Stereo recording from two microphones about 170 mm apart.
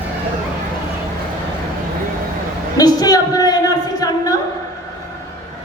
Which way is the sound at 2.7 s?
20° left (ahead or behind).